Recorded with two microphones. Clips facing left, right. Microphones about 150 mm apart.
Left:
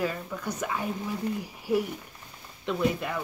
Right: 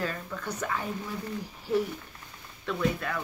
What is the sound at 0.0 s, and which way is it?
Speech, 10° left (ahead or behind).